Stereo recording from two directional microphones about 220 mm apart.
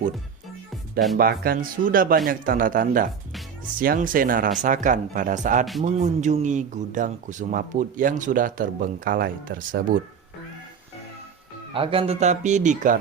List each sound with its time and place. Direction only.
1.1 s speech: 45° right (ahead or behind)
11.7 s speech: 25° right (ahead or behind)